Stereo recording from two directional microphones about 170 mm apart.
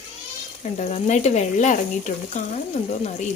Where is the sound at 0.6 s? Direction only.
40° left (ahead or behind).